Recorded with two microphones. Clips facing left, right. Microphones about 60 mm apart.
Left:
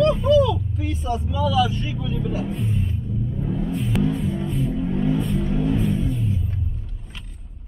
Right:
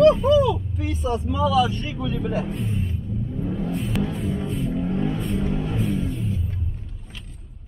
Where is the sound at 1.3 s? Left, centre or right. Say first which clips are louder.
Right 1 dB; right.